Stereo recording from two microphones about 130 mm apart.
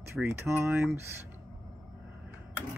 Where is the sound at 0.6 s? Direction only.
20° right (ahead or behind).